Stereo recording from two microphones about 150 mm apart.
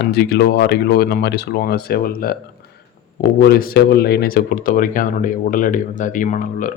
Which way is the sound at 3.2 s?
90° left.